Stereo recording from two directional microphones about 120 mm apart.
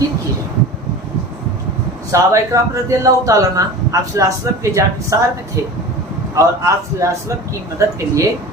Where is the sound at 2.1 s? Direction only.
25° right (ahead or behind).